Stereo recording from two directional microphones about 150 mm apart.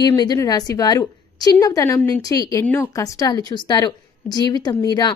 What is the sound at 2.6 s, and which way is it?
Speech, 10° left (ahead or behind).